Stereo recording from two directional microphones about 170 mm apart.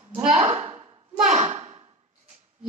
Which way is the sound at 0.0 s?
10° right (ahead or behind).